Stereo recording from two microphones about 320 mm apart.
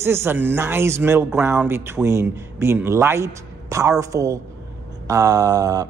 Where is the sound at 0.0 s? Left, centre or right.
Centre.